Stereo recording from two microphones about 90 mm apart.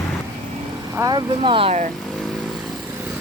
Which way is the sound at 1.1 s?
60° right (ahead or behind).